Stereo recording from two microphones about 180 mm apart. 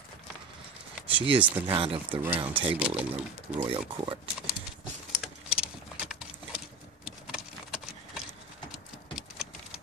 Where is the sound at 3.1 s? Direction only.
35° right (ahead or behind).